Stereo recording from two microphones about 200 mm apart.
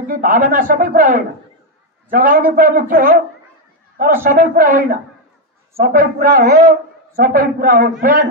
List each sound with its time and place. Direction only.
0.1 s a man's voice: 45° right (ahead or behind)